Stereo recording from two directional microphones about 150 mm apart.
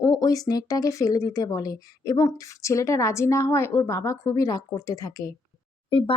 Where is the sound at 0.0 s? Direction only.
25° left (ahead or behind).